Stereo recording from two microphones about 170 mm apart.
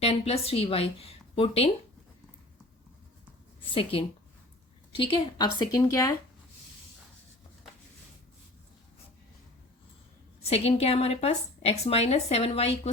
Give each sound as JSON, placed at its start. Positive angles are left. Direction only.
{"t": 0.0, "sound": "a woman's voice", "side_deg": 35}
{"t": 3.7, "sound": "a woman's voice", "side_deg": 30}
{"t": 10.4, "sound": "a woman's voice", "side_deg": 35}